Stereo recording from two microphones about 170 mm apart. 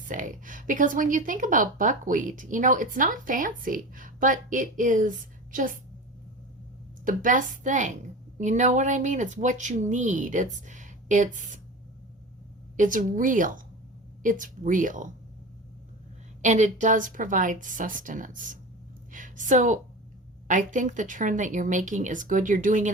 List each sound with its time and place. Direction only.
0.1 s speech: 50° right (ahead or behind)
7.0 s speech: 50° right (ahead or behind)
12.7 s speech: 50° right (ahead or behind)
16.4 s a woman's voice: 45° right (ahead or behind)